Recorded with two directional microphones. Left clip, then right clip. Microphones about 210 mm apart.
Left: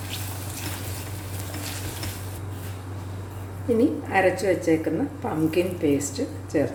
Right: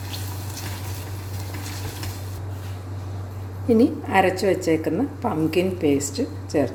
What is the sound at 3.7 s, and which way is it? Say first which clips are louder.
A woman's voice: right 3 dB; 40° right (ahead or behind).